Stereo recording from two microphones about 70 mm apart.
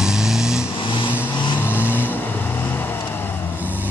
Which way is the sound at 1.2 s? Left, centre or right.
Left.